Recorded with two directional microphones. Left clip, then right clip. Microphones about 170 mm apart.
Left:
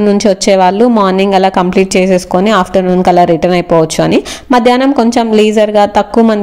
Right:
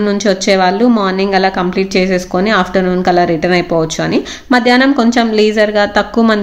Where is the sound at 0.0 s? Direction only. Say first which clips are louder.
Left 4 dB; 40° left (ahead or behind).